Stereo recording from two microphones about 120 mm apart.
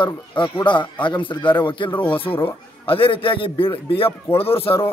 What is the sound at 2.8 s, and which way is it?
A man's voice, 50° left (ahead or behind).